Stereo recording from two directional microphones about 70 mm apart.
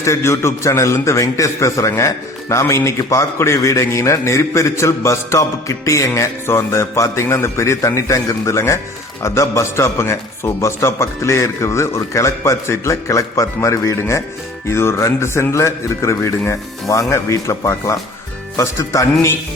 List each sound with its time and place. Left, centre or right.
0.0 s a man's voice: left
3.0 s a man's voice: left